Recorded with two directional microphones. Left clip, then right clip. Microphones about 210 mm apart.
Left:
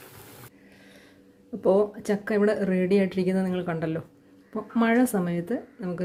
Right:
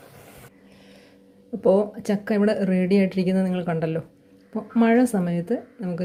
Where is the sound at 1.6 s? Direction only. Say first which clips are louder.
Right 2 dB; 5° right (ahead or behind).